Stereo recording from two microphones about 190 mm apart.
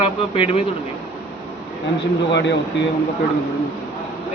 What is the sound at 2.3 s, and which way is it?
Speech, 65° left (ahead or behind).